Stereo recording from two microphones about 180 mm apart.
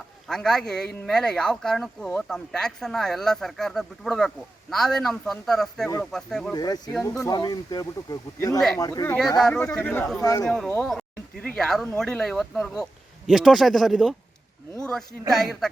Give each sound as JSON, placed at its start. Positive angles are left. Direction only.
{"t": 0.3, "sound": "speech", "side_deg": 5}
{"t": 6.5, "sound": "speech", "side_deg": 20}
{"t": 9.4, "sound": "speech", "side_deg": 5}
{"t": 10.2, "sound": "speech", "side_deg": 20}
{"t": 10.7, "sound": "speech", "side_deg": 5}
{"t": 15.3, "sound": "speech", "side_deg": 0}